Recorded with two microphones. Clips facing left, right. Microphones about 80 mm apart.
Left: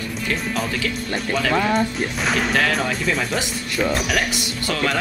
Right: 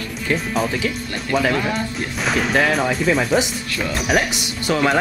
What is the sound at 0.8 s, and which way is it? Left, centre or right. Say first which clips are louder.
Speech: even; centre.